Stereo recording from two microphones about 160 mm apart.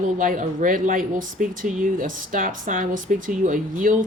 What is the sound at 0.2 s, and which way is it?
Speech, 55° right (ahead or behind).